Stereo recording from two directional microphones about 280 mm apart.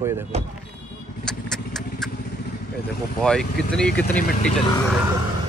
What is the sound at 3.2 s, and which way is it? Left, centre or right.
Speech, centre.